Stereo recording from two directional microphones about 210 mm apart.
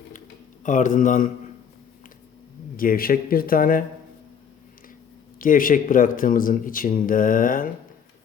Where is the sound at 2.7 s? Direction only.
45° left (ahead or behind).